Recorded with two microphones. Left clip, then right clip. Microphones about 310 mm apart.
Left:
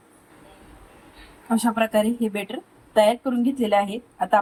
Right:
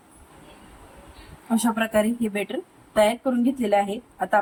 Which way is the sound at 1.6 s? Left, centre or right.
Centre.